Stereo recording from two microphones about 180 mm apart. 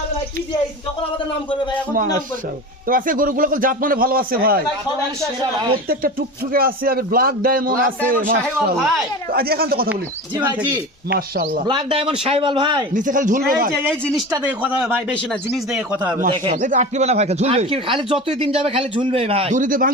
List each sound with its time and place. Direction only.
2.8 s speech: 50° right (ahead or behind)
5.4 s a man's voice: 25° right (ahead or behind)
5.9 s speech: 55° right (ahead or behind)
8.2 s a man's voice: 10° right (ahead or behind)
9.3 s speech: 60° right (ahead or behind)
11.1 s speech: 55° right (ahead or behind)
11.7 s a man's voice: 30° right (ahead or behind)
12.9 s speech: 45° right (ahead or behind)
13.7 s speech: 5° left (ahead or behind)
14.6 s a man's voice: 5° right (ahead or behind)
16.3 s a man's voice: 25° right (ahead or behind)
16.6 s speech: 45° right (ahead or behind)